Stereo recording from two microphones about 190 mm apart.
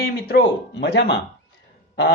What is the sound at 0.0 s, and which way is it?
A man's voice, 55° left (ahead or behind).